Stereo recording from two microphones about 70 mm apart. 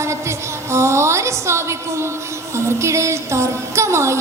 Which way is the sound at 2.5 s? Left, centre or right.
Right.